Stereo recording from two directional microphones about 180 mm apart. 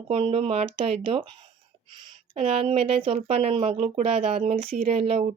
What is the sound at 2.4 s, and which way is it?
Speech, 30° right (ahead or behind).